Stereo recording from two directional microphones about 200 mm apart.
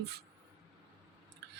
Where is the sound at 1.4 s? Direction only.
55° right (ahead or behind).